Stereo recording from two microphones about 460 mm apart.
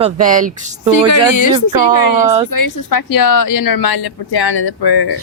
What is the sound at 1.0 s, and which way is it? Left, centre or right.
A woman's voice, left.